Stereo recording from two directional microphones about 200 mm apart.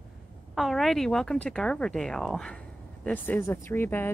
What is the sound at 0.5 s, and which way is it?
A woman's voice, centre (ahead or behind).